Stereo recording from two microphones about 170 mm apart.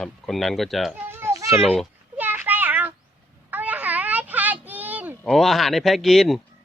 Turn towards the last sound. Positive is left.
turn(degrees=0)  # may be behind; listen again after turning